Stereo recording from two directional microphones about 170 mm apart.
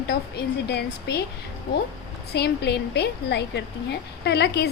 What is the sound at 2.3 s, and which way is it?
Speech, 75° left (ahead or behind).